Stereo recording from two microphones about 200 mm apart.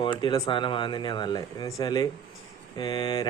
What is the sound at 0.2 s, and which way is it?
Speech, 25° left (ahead or behind).